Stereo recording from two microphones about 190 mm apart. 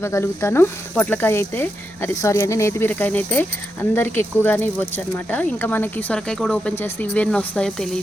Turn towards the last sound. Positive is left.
turn(degrees=5)  # may be behind; listen again after turning